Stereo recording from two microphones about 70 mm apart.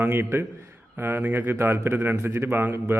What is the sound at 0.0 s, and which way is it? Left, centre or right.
A man's voice, right.